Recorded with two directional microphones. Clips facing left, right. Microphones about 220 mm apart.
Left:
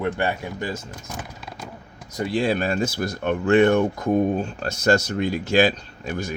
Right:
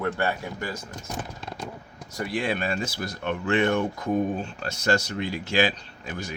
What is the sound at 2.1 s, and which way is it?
Mantra, 25° left (ahead or behind).